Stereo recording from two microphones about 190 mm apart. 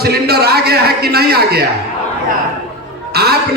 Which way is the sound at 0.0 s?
55° right (ahead or behind).